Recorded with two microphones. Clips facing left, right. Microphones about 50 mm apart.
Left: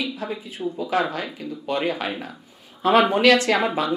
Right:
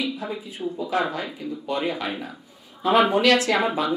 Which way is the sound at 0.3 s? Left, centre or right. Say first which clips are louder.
Left 1 dB; centre.